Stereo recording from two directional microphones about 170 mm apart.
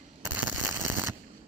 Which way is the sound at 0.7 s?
20° right (ahead or behind).